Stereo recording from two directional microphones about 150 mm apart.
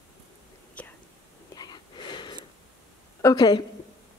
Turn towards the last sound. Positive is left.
turn(degrees=25)  # may be behind; listen again after turning